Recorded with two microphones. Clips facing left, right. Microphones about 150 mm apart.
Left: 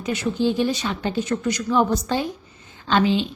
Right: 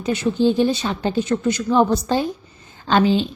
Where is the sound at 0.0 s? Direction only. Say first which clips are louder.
Right 4 dB; 30° right (ahead or behind).